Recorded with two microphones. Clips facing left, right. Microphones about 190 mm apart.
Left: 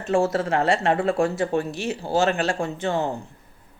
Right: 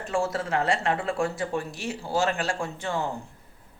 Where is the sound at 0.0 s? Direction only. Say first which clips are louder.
Left 6 dB; 25° left (ahead or behind).